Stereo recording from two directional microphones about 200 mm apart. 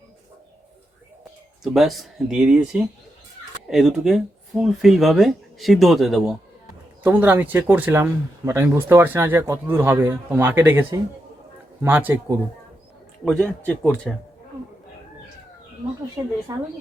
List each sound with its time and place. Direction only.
1.6 s speech: centre (ahead or behind)
13.2 s speech: 5° left (ahead or behind)
16.5 s speech: 15° right (ahead or behind)